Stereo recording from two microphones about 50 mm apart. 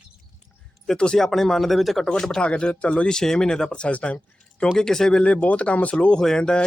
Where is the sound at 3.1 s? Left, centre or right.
Centre; by 4.6 s left.